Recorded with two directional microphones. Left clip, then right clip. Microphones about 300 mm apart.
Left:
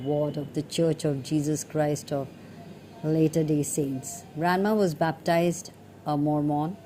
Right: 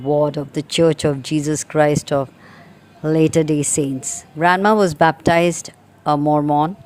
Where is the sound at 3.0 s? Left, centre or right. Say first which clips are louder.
Right 9 dB; right.